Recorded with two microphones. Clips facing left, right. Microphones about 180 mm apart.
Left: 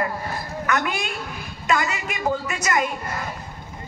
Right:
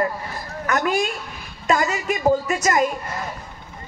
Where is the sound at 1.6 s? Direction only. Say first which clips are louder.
Right 3 dB; 40° right (ahead or behind).